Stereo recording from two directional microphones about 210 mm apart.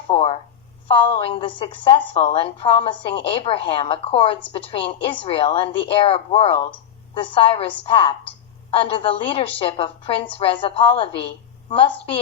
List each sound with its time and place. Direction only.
0.1 s a woman's voice: 30° left (ahead or behind)